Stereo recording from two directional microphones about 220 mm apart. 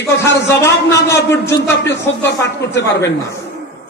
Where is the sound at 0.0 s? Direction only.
15° left (ahead or behind).